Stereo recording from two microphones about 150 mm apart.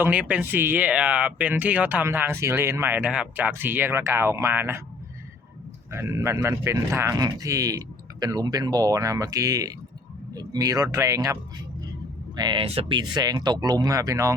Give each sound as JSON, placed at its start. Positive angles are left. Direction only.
{"t": 0.0, "sound": "speech", "side_deg": -10}
{"t": 5.9, "sound": "speech", "side_deg": -20}
{"t": 12.4, "sound": "speech", "side_deg": -30}